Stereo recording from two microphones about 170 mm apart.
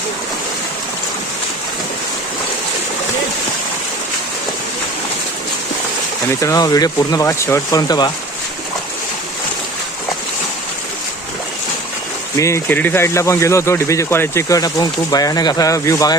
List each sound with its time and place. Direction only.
6.4 s speech: 20° left (ahead or behind)
12.4 s speech: 15° left (ahead or behind)